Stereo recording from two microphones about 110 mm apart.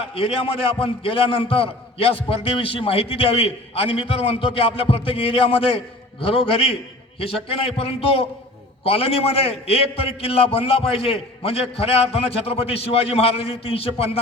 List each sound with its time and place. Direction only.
0.1 s a man's voice: 55° left (ahead or behind)